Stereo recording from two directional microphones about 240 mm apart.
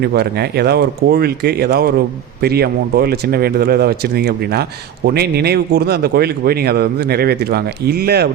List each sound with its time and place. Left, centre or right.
0.0 s speech: right